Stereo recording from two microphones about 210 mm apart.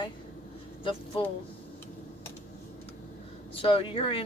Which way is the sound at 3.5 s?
25° left (ahead or behind).